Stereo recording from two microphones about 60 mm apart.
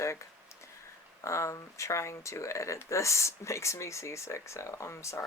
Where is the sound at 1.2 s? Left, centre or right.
Left.